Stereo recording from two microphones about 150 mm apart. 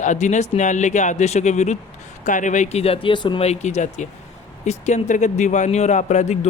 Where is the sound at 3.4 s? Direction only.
45° left (ahead or behind).